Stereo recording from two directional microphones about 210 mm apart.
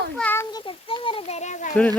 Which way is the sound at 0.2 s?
10° left (ahead or behind).